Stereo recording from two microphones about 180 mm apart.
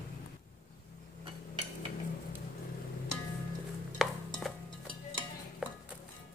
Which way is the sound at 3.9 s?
Centre (ahead or behind).